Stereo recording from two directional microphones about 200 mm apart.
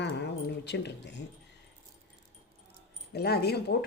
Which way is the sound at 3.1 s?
55° left (ahead or behind).